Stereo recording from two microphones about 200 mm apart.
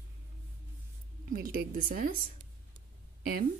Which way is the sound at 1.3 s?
45° right (ahead or behind).